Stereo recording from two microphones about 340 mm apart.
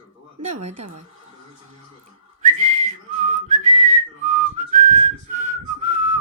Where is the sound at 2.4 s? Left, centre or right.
Right.